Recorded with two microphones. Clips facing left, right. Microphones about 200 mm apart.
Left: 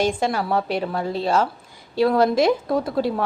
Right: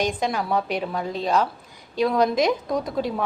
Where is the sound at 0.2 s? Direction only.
15° right (ahead or behind).